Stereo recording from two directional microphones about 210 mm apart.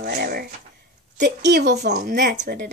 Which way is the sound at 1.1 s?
55° right (ahead or behind).